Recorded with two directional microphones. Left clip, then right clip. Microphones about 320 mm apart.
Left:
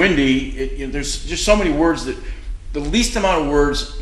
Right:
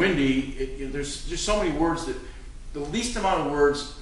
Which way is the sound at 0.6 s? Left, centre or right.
Left.